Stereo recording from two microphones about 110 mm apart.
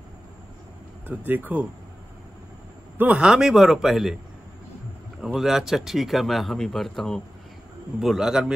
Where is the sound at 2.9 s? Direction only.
10° right (ahead or behind).